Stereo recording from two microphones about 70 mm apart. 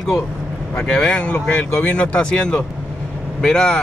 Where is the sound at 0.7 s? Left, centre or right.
Centre.